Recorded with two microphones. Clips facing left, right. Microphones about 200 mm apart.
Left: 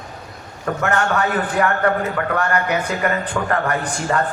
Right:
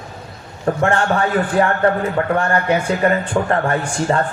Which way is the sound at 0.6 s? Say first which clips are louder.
Right 3 dB; 30° right (ahead or behind).